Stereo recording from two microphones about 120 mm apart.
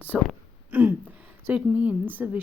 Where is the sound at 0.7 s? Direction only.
15° right (ahead or behind).